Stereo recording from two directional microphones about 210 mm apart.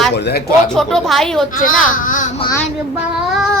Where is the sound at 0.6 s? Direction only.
5° left (ahead or behind).